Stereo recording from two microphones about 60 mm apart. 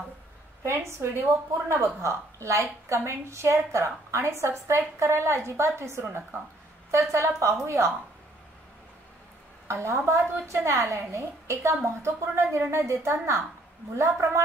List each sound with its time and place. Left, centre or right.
0.7 s a woman's voice: right
6.9 s a woman's voice: right
9.7 s a woman's voice: right